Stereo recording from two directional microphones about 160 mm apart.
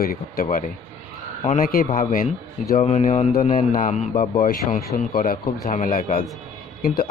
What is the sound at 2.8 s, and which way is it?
Speech, 50° left (ahead or behind).